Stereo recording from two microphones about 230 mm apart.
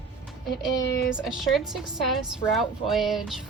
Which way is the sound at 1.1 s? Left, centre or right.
Centre.